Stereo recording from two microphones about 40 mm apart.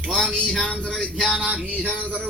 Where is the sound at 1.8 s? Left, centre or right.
Left.